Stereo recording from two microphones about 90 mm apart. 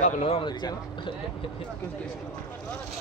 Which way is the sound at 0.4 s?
55° left (ahead or behind).